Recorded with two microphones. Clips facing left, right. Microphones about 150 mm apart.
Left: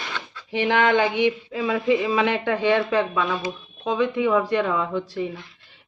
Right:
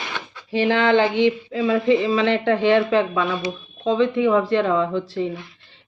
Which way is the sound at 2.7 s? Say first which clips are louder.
Right 3 dB; 20° right (ahead or behind).